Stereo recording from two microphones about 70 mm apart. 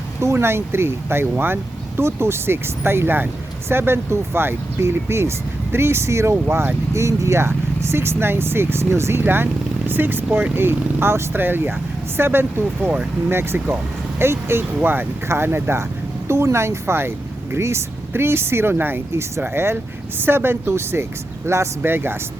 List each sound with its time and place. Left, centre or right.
0.2 s speech: right
12.9 s speech: right
13.3 s speech: right